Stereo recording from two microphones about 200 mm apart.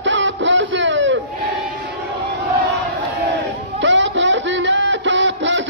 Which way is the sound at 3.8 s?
65° right (ahead or behind).